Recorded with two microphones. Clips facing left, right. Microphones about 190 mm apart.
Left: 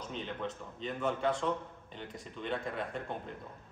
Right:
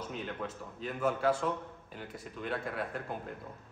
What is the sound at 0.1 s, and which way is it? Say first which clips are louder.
Speech: even; 5° right (ahead or behind).